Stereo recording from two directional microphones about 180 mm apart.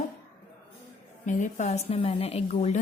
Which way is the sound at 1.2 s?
40° left (ahead or behind).